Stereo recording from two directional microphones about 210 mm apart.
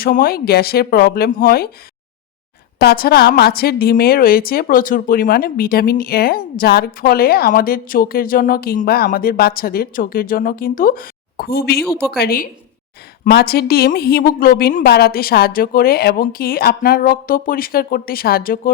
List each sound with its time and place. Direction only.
0.0 s a woman's voice: 45° left (ahead or behind)
2.7 s a woman's voice: 45° left (ahead or behind)